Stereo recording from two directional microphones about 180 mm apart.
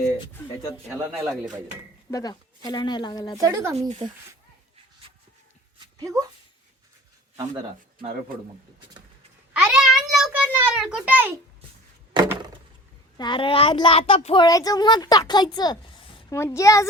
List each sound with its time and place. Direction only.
0.9 s a man's voice: 15° right (ahead or behind)
2.0 s a child's voice: 20° left (ahead or behind)
3.4 s a man's voice: 15° right (ahead or behind)
3.8 s speech: 35° right (ahead or behind)
6.0 s speech: 20° right (ahead or behind)
9.5 s a sound: 5° right (ahead or behind)
13.1 s a child's voice: 25° left (ahead or behind)
14.4 s a woman's voice: 20° left (ahead or behind)